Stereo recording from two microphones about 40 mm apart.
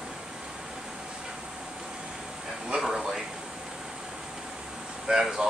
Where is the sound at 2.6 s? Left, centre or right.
Centre.